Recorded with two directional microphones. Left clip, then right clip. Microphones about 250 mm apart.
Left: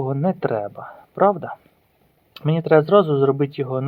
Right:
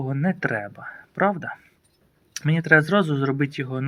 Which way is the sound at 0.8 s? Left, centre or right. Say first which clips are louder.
Left 2 dB; centre.